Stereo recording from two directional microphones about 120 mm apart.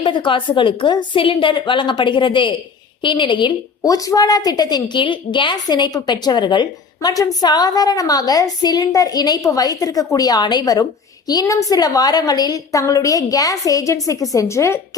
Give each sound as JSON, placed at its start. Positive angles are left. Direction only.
{"t": 0.0, "sound": "a woman's voice", "side_deg": 45}